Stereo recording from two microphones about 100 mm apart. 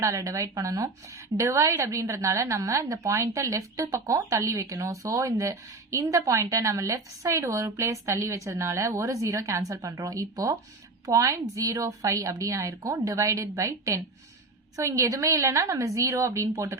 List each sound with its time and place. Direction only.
0.0 s a woman's voice: 30° right (ahead or behind)